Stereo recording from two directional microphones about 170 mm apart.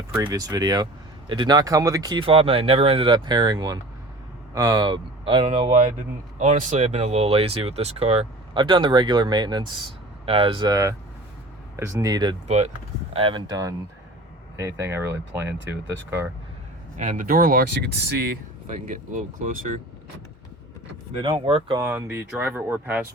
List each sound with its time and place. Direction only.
0.3 s speech: 20° right (ahead or behind)
6.4 s speech: 45° right (ahead or behind); by 12.4 s 25° right (ahead or behind)
12.5 s speech: 40° right (ahead or behind); by 16.3 s 15° right (ahead or behind)
17.0 s speech: 50° right (ahead or behind)
18.9 s speech: 50° right (ahead or behind)
21.2 s speech: 30° right (ahead or behind)
21.8 s speech: 15° right (ahead or behind)